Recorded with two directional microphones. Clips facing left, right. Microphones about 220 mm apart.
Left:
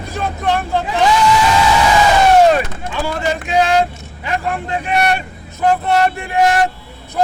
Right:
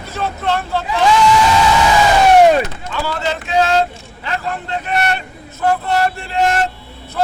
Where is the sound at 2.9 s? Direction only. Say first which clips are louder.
Left 2 dB; 15° left (ahead or behind).